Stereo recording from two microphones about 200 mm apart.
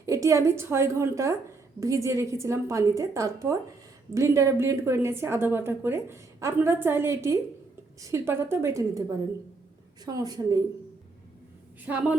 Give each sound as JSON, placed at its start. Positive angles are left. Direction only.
{"t": 0.0, "sound": "a woman's voice", "side_deg": -15}
{"t": 11.9, "sound": "a woman's voice", "side_deg": -10}